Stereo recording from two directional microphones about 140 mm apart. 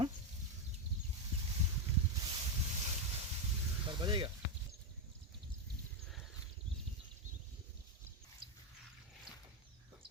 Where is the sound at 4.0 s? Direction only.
35° right (ahead or behind).